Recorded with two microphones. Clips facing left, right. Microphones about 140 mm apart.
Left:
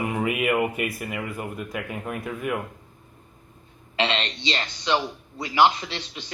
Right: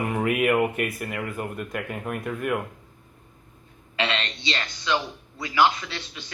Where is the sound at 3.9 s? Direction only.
30° left (ahead or behind).